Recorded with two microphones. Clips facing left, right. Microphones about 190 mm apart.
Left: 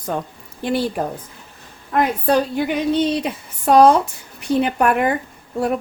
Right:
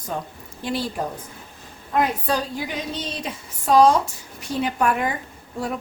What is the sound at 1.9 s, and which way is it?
A woman's voice, 60° left (ahead or behind).